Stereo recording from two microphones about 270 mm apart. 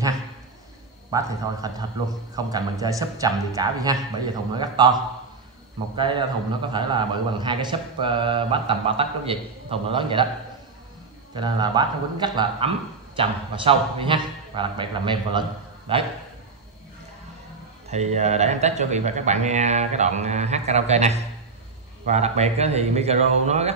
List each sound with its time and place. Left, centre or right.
1.1 s a man's voice: centre
11.3 s a man's voice: centre
17.8 s a man's voice: right